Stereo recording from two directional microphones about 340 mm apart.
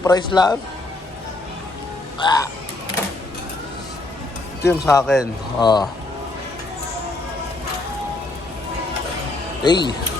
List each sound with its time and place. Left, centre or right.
0.0 s speech: centre
2.1 s speech: centre
4.6 s speech: centre
5.5 s speech: centre
9.6 s speech: centre